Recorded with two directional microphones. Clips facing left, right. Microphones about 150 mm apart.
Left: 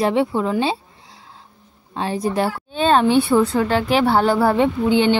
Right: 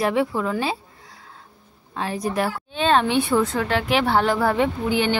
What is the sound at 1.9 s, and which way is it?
A woman's voice, 30° left (ahead or behind).